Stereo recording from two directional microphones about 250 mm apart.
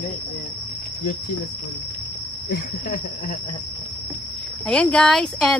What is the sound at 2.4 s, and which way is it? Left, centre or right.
Cricket, left.